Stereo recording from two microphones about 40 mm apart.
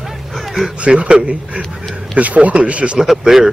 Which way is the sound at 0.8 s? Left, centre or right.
Right.